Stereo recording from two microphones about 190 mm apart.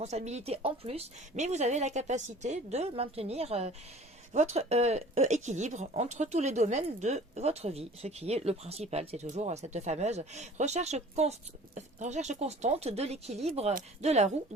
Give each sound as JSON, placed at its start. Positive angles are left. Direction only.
{"t": 0.0, "sound": "speech", "side_deg": -35}